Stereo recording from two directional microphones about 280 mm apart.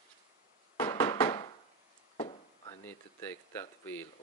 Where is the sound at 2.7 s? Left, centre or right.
Centre.